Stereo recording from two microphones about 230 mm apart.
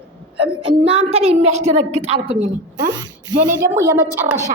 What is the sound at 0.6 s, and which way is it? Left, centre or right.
A woman's voice, right.